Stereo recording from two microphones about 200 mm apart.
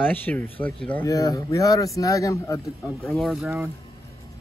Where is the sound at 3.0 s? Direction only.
Centre (ahead or behind).